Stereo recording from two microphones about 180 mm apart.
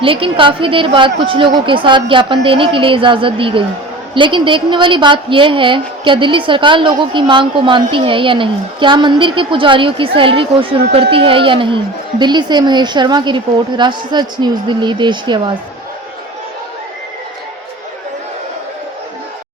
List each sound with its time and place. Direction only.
0.0 s a woman's voice: 30° right (ahead or behind)